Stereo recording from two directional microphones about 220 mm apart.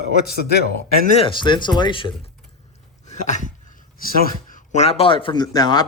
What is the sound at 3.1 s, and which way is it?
Speech, 35° left (ahead or behind).